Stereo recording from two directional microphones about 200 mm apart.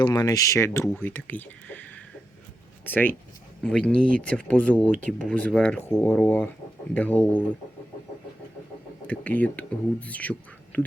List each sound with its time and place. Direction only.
0.0 s speech: 20° left (ahead or behind)
9.0 s speech: 5° left (ahead or behind)